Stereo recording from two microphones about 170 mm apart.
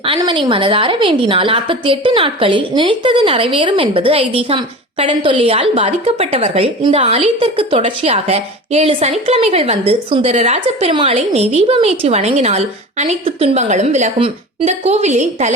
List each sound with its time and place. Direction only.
0.2 s a woman's voice: 25° right (ahead or behind); by 15.5 s 45° right (ahead or behind)